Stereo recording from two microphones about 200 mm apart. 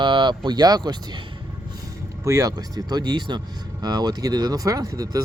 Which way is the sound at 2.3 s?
15° right (ahead or behind).